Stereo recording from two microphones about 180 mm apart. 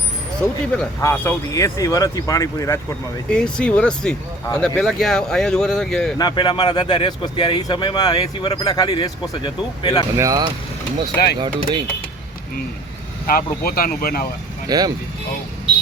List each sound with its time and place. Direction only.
1.0 s speech: 15° left (ahead or behind)
3.2 s speech: 5° left (ahead or behind)
6.1 s speech: 25° left (ahead or behind)
10.2 s speech: 20° right (ahead or behind)
13.2 s speech: 55° left (ahead or behind)
14.7 s speech: 20° right (ahead or behind)